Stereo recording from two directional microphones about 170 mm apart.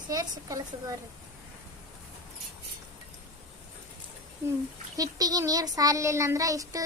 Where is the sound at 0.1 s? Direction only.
20° right (ahead or behind).